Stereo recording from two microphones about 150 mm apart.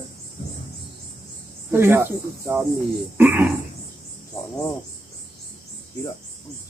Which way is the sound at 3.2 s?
15° right (ahead or behind).